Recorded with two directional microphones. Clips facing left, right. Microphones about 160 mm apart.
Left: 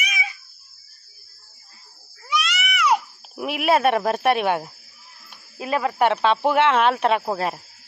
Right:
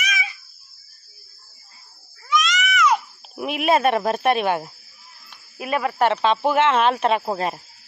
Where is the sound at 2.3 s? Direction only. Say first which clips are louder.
Right 4 dB; 10° left (ahead or behind).